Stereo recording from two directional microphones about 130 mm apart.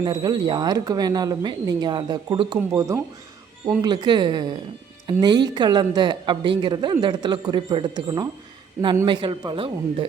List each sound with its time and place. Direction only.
0.0 s speech: 35° right (ahead or behind)
3.8 s speech: 35° right (ahead or behind)